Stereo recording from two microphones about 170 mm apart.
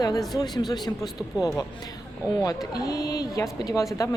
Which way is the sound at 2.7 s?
20° left (ahead or behind).